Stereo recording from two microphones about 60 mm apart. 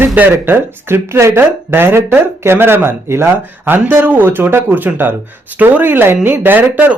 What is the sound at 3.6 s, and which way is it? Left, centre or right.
Speech, right.